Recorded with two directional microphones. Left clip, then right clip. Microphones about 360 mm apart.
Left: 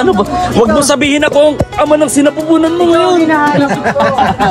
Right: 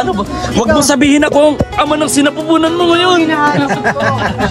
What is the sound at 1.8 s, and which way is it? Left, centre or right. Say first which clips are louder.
Speech: left 3 dB; centre.